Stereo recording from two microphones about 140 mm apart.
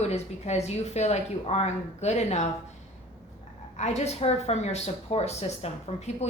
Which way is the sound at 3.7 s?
50° left (ahead or behind).